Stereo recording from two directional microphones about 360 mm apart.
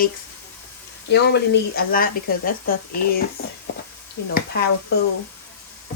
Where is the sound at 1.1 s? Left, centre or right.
Left.